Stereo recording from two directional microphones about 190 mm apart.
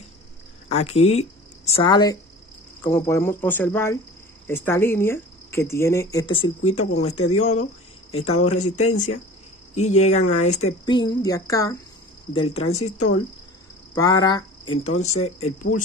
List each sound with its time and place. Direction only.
0.7 s a woman's voice: 35° left (ahead or behind)
1.9 s speech: 20° left (ahead or behind)
6.7 s speech: 35° left (ahead or behind)
10.9 s speech: 20° left (ahead or behind)
12.4 s speech: 30° left (ahead or behind)
13.9 s speech: 20° left (ahead or behind)
14.8 s speech: 35° left (ahead or behind)